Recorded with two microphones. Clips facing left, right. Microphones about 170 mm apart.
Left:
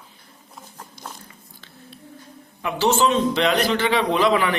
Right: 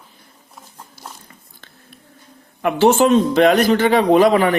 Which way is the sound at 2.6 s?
50° right (ahead or behind).